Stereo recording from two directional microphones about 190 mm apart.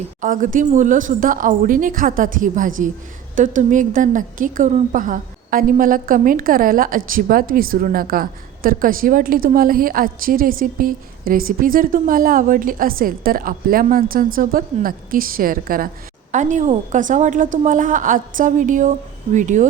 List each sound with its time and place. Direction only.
0.2 s a woman's voice: 45° right (ahead or behind)